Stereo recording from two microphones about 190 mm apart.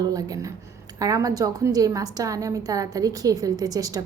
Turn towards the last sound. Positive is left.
turn(degrees=-20)  # may be behind; listen again after turning